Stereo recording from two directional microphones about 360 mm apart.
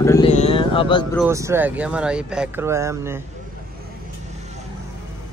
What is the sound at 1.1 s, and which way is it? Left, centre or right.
Speech, centre.